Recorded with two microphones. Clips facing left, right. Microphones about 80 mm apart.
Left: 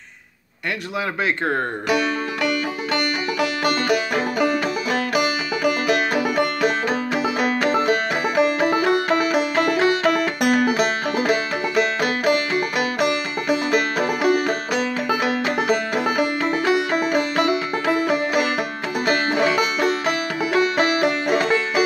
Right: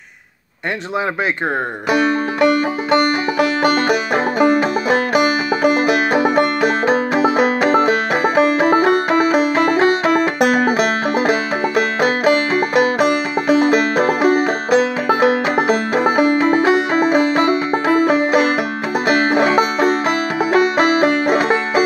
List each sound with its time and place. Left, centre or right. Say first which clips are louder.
1.9 s music: right 7 dB; right